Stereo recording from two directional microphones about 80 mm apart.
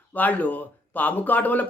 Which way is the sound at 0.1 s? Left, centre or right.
Left.